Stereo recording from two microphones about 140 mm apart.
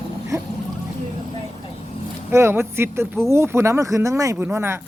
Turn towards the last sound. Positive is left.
turn(degrees=-15)  # may be behind; listen again after turning